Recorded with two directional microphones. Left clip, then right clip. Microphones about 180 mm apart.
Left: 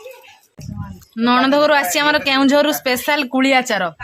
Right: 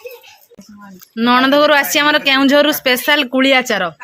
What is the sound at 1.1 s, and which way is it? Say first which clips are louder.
A woman's voice: right 3 dB; 15° right (ahead or behind).